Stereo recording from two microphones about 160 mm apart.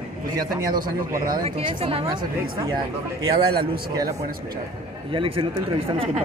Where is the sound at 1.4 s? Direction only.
35° right (ahead or behind).